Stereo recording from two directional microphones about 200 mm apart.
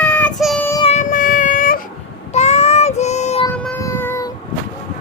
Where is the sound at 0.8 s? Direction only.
35° left (ahead or behind).